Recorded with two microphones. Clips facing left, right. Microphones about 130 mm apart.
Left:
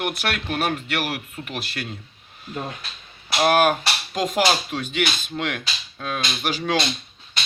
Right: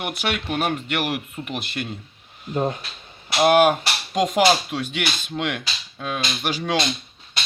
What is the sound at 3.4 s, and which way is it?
Speech, 25° right (ahead or behind).